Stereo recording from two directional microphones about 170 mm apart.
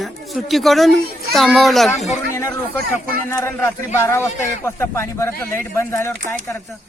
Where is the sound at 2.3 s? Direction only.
15° left (ahead or behind).